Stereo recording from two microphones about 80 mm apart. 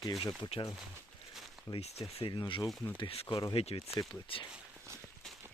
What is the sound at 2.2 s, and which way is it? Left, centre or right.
Speech, left.